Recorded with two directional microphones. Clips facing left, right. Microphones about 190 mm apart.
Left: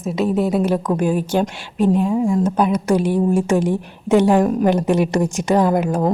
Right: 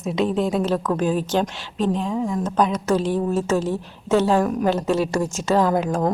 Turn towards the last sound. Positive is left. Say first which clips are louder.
# left 3 dB
turn(degrees=10)  # may be behind; listen again after turning